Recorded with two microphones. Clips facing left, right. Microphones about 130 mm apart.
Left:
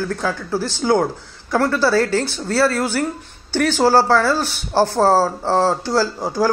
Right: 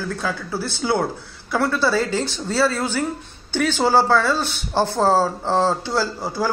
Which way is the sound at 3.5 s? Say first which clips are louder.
Left 3 dB; 10° left (ahead or behind).